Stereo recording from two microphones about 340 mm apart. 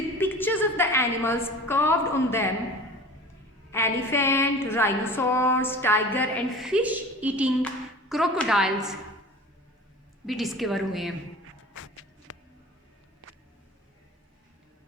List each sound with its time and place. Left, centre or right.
0.2 s a woman's voice: centre
3.7 s a woman's voice: centre
10.2 s a woman's voice: centre
12.3 s a sound: left